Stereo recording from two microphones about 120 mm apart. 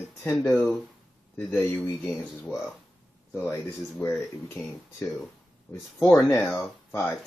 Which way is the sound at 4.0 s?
20° left (ahead or behind).